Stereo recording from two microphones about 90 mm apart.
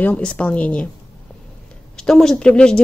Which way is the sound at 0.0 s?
15° left (ahead or behind).